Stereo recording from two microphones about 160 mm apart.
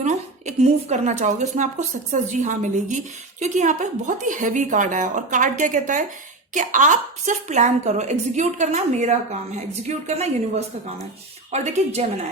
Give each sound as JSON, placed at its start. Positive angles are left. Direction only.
{"t": 0.0, "sound": "a woman's voice", "side_deg": -45}